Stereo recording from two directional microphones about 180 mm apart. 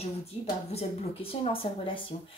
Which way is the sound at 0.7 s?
35° left (ahead or behind).